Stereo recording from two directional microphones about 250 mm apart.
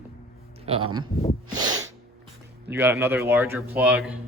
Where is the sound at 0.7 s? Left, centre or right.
Right.